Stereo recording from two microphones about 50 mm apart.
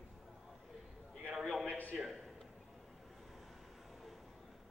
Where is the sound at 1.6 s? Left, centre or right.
Left.